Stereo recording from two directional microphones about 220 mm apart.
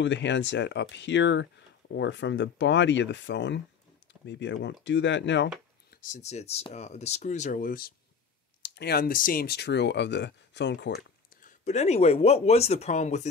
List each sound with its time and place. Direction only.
0.0 s speech: 55° left (ahead or behind)
6.0 s speech: 30° left (ahead or behind); by 11.0 s 50° left (ahead or behind)
11.4 s speech: 30° left (ahead or behind)